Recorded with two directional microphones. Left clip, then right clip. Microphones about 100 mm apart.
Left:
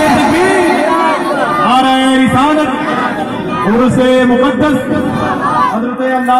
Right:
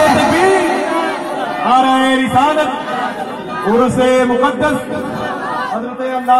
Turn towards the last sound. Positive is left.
turn(degrees=-30)  # may be behind; listen again after turning